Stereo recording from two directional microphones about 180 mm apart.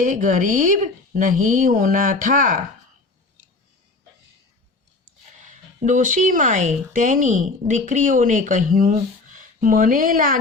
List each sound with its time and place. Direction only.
0.0 s speech: 45° right (ahead or behind)
5.5 s speech: 45° right (ahead or behind)